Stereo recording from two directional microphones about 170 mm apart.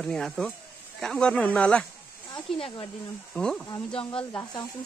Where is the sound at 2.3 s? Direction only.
30° left (ahead or behind).